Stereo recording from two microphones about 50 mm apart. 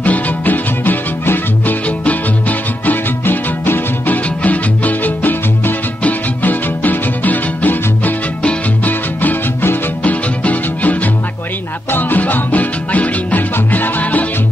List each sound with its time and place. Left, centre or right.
0.0 s music: left
2.9 s music: left
4.4 s music: left
10.0 s music: left